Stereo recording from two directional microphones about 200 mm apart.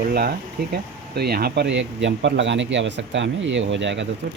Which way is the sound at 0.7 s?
55° right (ahead or behind).